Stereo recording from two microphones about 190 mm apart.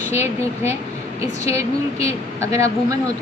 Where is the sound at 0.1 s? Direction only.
35° left (ahead or behind).